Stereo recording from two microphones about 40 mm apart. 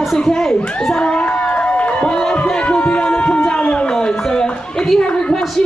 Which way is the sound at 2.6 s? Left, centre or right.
Left.